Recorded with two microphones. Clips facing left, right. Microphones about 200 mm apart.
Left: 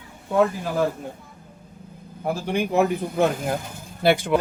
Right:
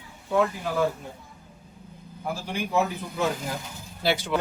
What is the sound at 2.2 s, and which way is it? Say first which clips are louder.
Speech: left 7 dB; 55° left (ahead or behind).